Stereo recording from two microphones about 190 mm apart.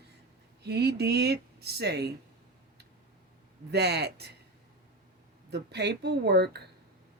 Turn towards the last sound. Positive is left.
turn(degrees=-60)  # may be behind; listen again after turning